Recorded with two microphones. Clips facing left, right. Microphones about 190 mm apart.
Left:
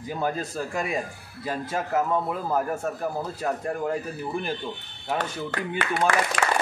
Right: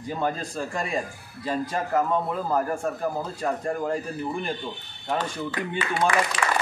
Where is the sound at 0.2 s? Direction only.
5° left (ahead or behind).